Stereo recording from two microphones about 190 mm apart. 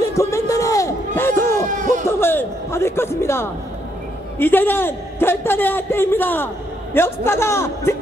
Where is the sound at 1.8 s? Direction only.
40° right (ahead or behind).